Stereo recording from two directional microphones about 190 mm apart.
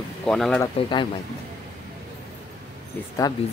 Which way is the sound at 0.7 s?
25° left (ahead or behind).